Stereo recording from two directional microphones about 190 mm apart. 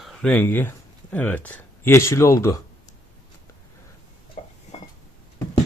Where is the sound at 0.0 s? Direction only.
Centre (ahead or behind).